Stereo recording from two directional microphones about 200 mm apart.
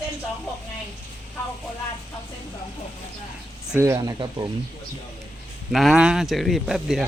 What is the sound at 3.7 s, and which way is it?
Speech, 15° right (ahead or behind).